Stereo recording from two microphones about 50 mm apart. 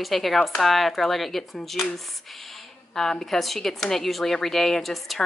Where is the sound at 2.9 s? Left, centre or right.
Centre.